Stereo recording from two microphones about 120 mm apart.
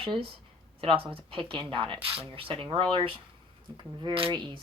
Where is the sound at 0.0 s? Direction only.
45° right (ahead or behind).